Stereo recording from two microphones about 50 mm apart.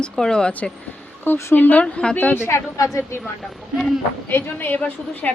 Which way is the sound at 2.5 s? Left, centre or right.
Left.